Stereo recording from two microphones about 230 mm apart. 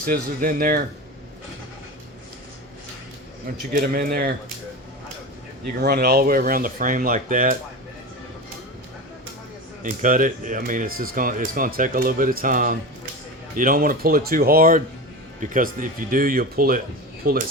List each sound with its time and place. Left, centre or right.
0.0 s speech: right
3.7 s speech: right
5.8 s speech: right
9.8 s speech: right